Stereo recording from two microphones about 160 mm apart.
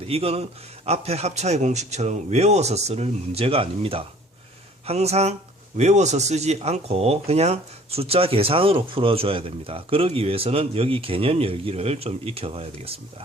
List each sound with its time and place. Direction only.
0.0 s a man's voice: 40° right (ahead or behind)